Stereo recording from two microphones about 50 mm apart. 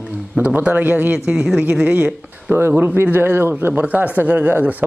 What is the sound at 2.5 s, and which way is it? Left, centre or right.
Speech, right.